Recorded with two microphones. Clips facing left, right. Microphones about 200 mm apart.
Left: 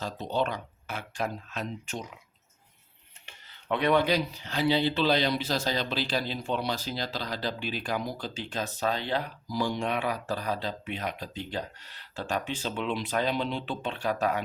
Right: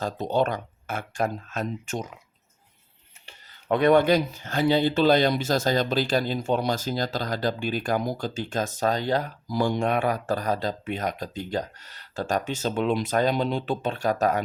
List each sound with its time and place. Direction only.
0.0 s speech: 45° right (ahead or behind)
3.2 s speech: 45° right (ahead or behind)